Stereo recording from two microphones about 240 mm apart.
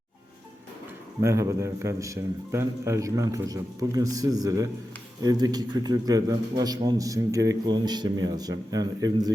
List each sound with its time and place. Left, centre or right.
1.2 s a man's voice: centre